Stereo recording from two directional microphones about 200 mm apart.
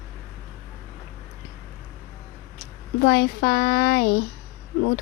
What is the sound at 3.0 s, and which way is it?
Speech, 50° left (ahead or behind).